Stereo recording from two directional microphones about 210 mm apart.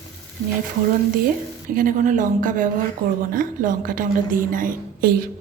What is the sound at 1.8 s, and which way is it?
A woman's voice, 40° right (ahead or behind).